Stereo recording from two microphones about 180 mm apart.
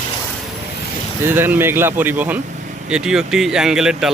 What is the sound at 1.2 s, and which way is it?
Speech, 10° right (ahead or behind).